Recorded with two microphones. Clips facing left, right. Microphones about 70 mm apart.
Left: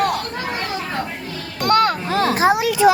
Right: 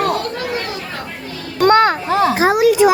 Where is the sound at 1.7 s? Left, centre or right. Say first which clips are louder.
Right 4 dB; right.